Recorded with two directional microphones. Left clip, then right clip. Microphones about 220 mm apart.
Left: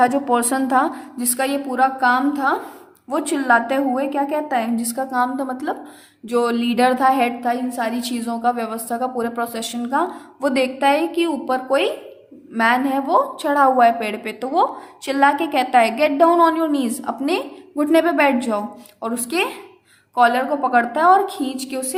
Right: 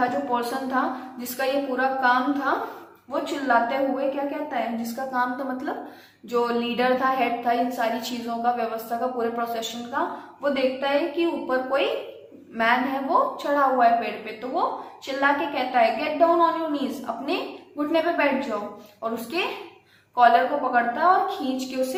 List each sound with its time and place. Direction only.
0.0 s a woman's voice: 55° left (ahead or behind)